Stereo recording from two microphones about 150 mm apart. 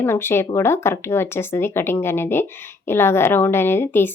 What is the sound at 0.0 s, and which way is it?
A woman's voice, 15° left (ahead or behind).